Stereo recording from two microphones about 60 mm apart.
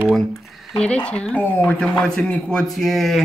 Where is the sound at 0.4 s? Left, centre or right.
Centre.